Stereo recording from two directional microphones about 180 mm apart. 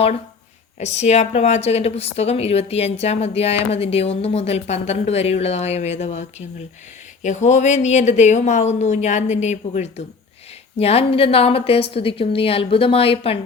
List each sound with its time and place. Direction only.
0.8 s a woman's voice: 40° left (ahead or behind)